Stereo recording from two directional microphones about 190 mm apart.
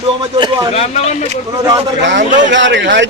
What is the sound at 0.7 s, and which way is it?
Speech, 35° left (ahead or behind).